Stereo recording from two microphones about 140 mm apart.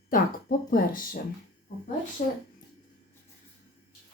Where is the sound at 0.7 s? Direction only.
80° left.